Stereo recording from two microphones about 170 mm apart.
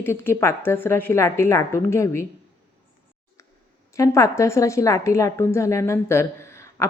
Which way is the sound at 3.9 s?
20° left (ahead or behind).